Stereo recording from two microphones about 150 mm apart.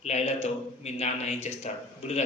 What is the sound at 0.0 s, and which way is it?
Speech, 45° left (ahead or behind).